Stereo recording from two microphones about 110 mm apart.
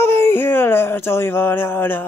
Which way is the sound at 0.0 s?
20° left (ahead or behind).